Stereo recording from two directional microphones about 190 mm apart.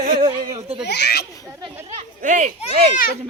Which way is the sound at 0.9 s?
60° left (ahead or behind).